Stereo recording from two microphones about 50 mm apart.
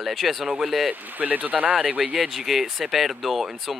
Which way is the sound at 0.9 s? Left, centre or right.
Right.